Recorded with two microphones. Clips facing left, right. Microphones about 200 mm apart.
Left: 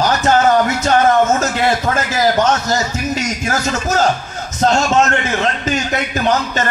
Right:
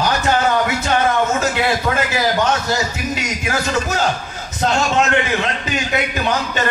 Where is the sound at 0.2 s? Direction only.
40° left (ahead or behind).